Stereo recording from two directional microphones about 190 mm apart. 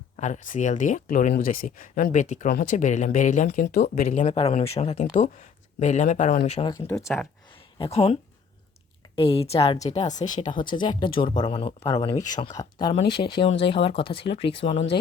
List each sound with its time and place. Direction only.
0.2 s speech: 40° left (ahead or behind)
6.4 s speech: 25° left (ahead or behind)
6.7 s speech: 10° left (ahead or behind)
7.9 s speech: 30° left (ahead or behind)
10.2 s speech: 20° left (ahead or behind)